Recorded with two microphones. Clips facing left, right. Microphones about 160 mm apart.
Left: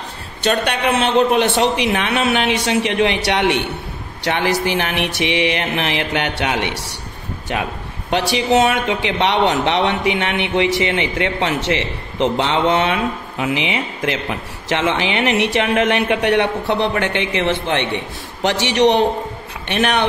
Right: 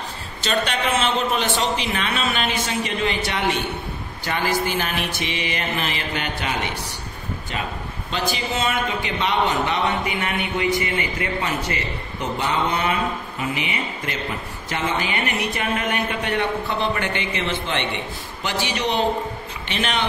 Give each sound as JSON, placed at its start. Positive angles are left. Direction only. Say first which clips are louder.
{"t": 0.4, "sound": "a man's voice", "louder": "left 5 dB", "side_deg": 60}
{"t": 8.1, "sound": "a man's voice", "louder": "left 9 dB", "side_deg": 80}
{"t": 18.4, "sound": "a man's voice", "louder": "left 10 dB", "side_deg": 80}
{"t": 19.7, "sound": "a man's voice", "louder": "left 7 dB", "side_deg": 65}